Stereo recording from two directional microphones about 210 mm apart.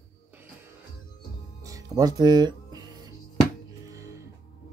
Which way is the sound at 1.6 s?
15° right (ahead or behind).